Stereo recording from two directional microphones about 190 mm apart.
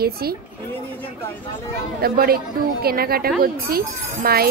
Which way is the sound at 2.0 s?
50° right (ahead or behind).